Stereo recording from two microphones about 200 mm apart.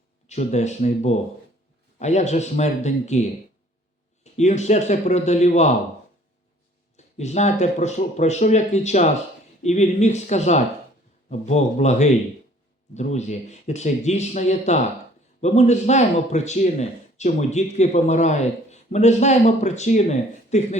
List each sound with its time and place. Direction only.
0.3 s speech: 35° left (ahead or behind)
6.9 s speech: 35° left (ahead or behind)